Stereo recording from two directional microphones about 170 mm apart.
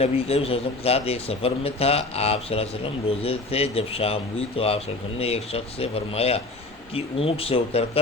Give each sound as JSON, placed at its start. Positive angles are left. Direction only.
{"t": 0.0, "sound": "speech", "side_deg": 35}